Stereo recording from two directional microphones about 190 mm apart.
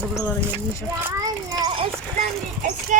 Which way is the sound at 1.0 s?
20° right (ahead or behind).